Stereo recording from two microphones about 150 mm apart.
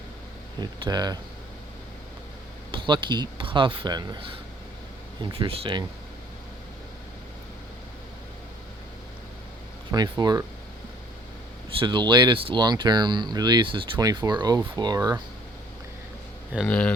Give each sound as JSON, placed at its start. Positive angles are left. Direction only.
{"t": 0.6, "sound": "speech", "side_deg": -30}
{"t": 2.7, "sound": "speech", "side_deg": -30}
{"t": 5.2, "sound": "speech", "side_deg": -35}
{"t": 9.9, "sound": "speech", "side_deg": -25}
{"t": 11.8, "sound": "speech", "side_deg": -30}
{"t": 16.6, "sound": "speech", "side_deg": 5}